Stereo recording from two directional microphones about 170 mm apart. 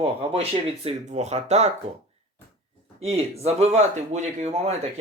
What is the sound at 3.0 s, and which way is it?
Speech, 35° right (ahead or behind).